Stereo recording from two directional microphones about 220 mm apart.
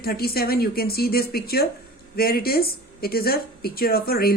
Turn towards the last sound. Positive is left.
turn(degrees=45)  # may be behind; listen again after turning